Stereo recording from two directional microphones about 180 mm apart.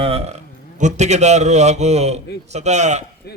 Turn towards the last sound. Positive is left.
turn(degrees=-40)  # may be behind; listen again after turning